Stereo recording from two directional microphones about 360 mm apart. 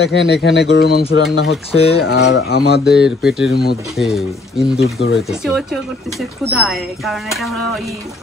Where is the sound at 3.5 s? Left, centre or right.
Left.